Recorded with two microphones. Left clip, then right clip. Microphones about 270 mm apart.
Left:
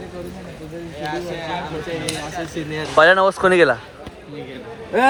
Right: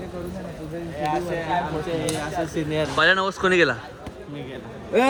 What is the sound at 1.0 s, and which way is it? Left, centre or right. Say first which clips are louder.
Speech: right 1 dB; right.